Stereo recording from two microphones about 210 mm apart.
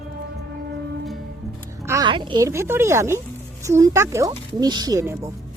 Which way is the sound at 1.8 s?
15° right (ahead or behind).